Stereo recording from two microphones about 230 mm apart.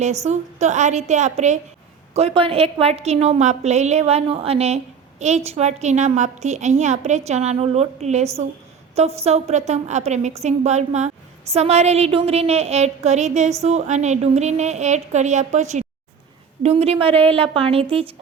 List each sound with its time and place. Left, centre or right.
0.3 s a woman's voice: right